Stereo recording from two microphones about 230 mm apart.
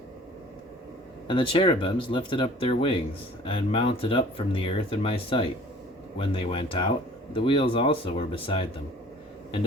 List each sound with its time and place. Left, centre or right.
1.3 s speech: left